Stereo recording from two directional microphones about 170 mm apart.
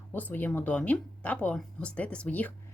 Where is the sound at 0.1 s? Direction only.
10° left (ahead or behind).